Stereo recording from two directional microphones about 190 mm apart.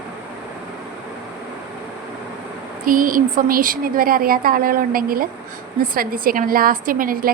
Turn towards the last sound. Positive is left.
turn(degrees=-50)  # may be behind; listen again after turning